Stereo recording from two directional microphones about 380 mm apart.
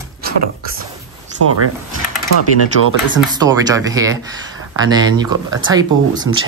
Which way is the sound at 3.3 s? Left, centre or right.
Centre.